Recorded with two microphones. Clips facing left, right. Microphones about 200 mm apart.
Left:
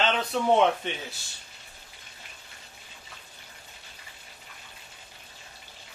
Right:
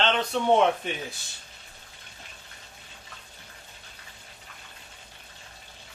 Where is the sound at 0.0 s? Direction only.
5° left (ahead or behind).